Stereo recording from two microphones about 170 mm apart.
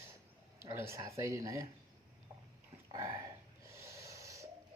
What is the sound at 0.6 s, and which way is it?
Speech, 15° right (ahead or behind).